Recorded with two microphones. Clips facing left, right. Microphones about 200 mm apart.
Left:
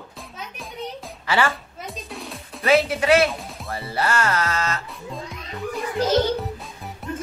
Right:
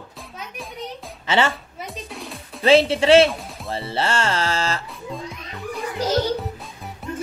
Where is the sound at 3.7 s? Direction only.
25° right (ahead or behind).